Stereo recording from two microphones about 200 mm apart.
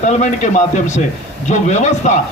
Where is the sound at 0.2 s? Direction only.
35° left (ahead or behind).